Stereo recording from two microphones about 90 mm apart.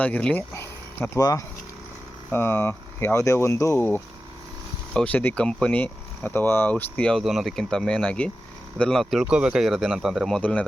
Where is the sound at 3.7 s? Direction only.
20° left (ahead or behind).